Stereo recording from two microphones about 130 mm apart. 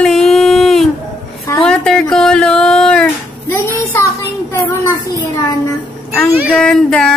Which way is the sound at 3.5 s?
20° left (ahead or behind).